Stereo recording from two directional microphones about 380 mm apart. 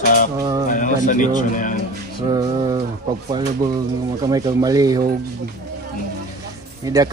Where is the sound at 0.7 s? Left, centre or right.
Centre.